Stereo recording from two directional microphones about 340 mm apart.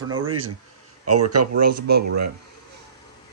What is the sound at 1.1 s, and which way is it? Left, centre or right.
Speech, right.